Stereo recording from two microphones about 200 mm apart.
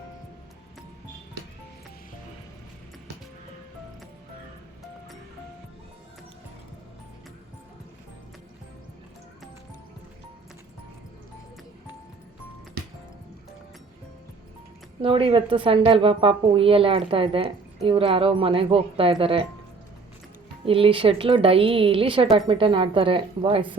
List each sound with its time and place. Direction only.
15.0 s a woman's voice: 25° right (ahead or behind)
20.7 s a woman's voice: 25° right (ahead or behind)